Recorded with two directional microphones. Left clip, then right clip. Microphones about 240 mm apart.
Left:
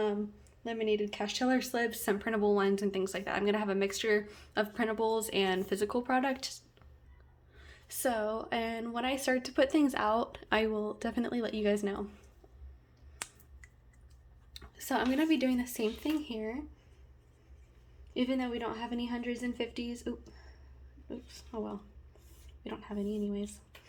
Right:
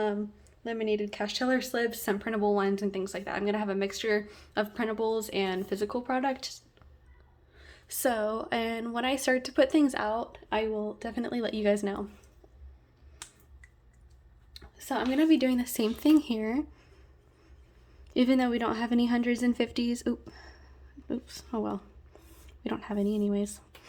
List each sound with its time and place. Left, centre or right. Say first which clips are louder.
0.6 s a woman's voice: right 2 dB; centre
10.2 s speech: even; centre
11.2 s a woman's voice: right 4 dB; centre
14.5 s a sound: right 1 dB; centre
15.1 s speech: right 9 dB; centre; by 16.8 s right
18.1 s a woman's voice: right 7 dB; right